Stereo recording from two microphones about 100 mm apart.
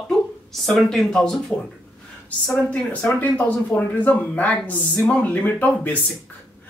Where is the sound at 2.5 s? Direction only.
15° left (ahead or behind).